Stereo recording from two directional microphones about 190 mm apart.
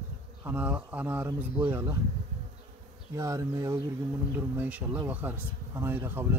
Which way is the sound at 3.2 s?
15° right (ahead or behind).